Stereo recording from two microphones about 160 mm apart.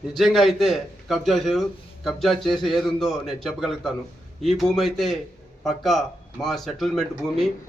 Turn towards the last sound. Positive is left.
turn(degrees=0)  # may be behind; listen again after turning